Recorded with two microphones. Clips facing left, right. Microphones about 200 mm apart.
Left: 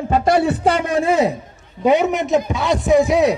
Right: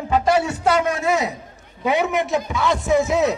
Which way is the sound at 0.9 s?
30° left (ahead or behind).